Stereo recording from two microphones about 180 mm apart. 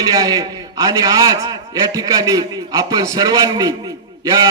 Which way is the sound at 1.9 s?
20° right (ahead or behind).